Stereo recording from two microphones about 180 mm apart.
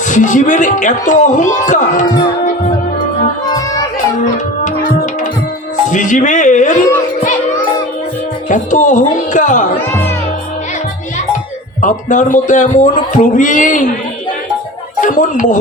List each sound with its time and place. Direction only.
0.1 s speech: 45° left (ahead or behind)
3.4 s music: 20° left (ahead or behind)
5.9 s speech: 45° left (ahead or behind)
8.4 s speech: 45° left (ahead or behind)
9.7 s speech: 10° left (ahead or behind)
11.8 s speech: 45° left (ahead or behind)
15.0 s speech: 45° left (ahead or behind)